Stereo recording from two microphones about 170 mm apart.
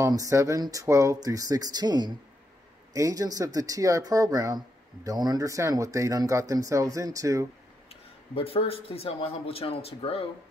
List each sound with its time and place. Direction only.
0.0 s speech: 20° right (ahead or behind)
7.9 s speech: 35° left (ahead or behind)